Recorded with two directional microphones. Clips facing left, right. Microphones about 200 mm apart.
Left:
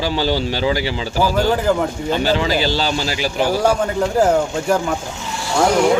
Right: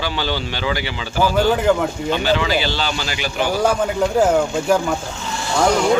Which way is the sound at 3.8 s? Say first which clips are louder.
Even; 5° right (ahead or behind).